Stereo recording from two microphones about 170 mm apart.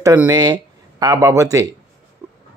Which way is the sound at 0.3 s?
25° right (ahead or behind).